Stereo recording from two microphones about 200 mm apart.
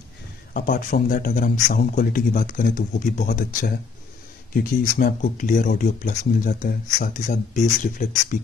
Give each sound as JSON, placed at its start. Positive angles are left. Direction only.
{"t": 0.5, "sound": "a man's voice", "side_deg": 45}
{"t": 4.9, "sound": "speech", "side_deg": 40}